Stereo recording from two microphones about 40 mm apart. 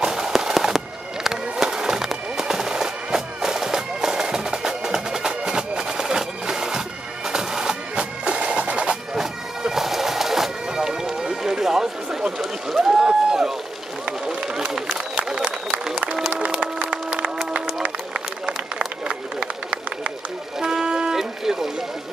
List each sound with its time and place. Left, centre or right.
0.0 s fireworks: centre
7.2 s bagpipes: centre
7.9 s bagpipes: right
9.1 s bagpipes: centre
14.2 s run: centre
14.8 s a sound: centre
16.3 s music: right
19.0 s a sound: right